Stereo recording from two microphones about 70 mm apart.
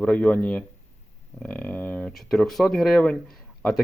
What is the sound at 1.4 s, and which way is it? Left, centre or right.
Speech, left.